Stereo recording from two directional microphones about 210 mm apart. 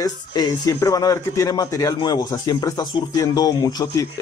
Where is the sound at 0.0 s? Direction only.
20° left (ahead or behind).